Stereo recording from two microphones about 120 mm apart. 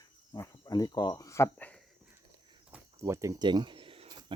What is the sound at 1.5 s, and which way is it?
Speech, 10° left (ahead or behind).